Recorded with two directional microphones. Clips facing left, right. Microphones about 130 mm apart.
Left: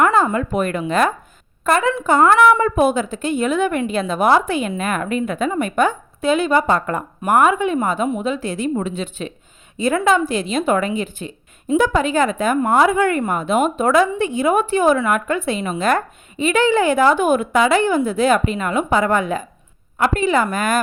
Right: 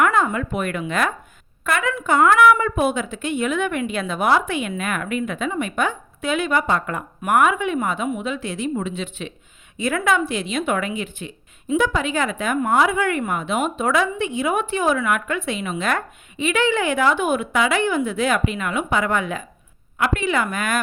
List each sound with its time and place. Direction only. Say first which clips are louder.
0.0 s speech: left 3 dB; 35° left (ahead or behind)
6.2 s speech: left 5 dB; 30° left (ahead or behind)